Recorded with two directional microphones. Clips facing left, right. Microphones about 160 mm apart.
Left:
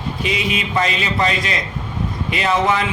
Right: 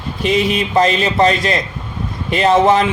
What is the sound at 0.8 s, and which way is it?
A man's voice, 40° right (ahead or behind).